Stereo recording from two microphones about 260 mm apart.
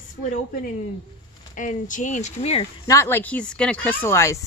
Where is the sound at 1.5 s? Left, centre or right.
Left.